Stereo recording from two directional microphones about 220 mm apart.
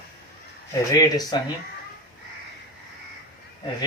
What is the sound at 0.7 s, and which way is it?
Speech, 15° left (ahead or behind).